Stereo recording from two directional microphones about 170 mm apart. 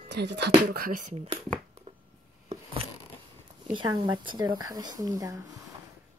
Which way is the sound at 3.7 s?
30° right (ahead or behind).